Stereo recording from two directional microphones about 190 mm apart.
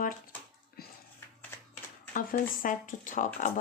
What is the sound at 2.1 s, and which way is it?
A woman's voice, 45° left (ahead or behind).